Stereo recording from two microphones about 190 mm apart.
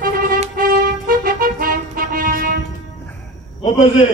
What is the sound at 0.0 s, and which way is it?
Music, 45° right (ahead or behind).